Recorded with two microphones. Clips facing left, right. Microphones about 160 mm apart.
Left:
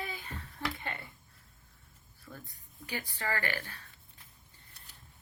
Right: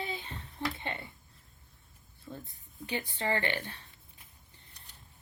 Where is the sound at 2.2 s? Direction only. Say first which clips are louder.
Right 4 dB; 25° right (ahead or behind).